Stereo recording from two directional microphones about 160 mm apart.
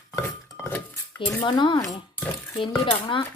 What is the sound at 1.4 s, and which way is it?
Speech, 30° left (ahead or behind).